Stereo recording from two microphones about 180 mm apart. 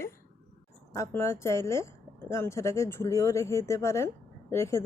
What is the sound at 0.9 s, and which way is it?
Speech, 15° left (ahead or behind).